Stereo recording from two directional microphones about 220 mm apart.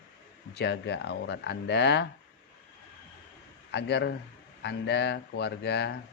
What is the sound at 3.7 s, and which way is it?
Speech, 50° left (ahead or behind).